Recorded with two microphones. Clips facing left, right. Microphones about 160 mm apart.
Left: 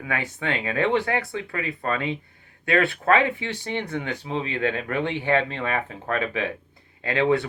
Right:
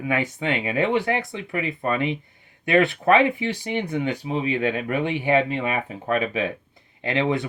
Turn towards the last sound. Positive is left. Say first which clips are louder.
# left 1 dB
turn(degrees=-20)  # may be behind; listen again after turning